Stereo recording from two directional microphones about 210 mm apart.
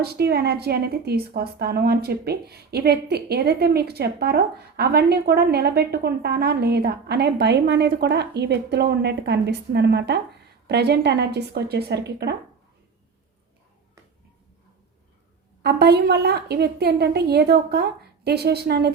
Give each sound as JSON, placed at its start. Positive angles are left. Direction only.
{"t": 0.0, "sound": "a woman's voice", "side_deg": -50}
{"t": 15.6, "sound": "a woman's voice", "side_deg": -50}